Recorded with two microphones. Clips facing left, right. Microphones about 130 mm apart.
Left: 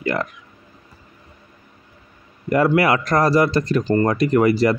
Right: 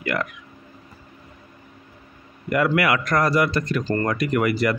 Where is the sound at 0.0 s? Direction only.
30° left (ahead or behind).